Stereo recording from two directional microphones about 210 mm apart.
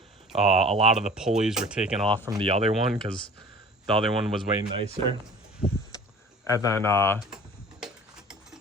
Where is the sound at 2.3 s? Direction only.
25° right (ahead or behind).